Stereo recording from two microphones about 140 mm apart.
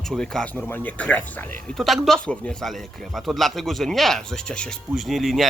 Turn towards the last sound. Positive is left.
turn(degrees=0)  # may be behind; listen again after turning